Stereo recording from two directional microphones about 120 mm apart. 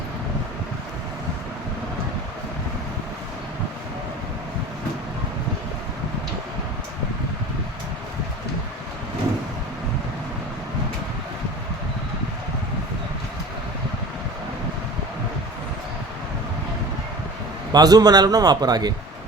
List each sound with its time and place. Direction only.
17.7 s a man's voice: 35° right (ahead or behind)